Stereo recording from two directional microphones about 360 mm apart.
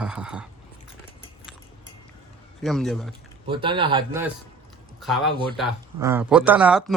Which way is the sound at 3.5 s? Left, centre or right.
Centre.